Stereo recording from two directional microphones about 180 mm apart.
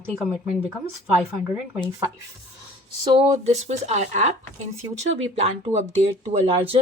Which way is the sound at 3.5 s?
40° right (ahead or behind).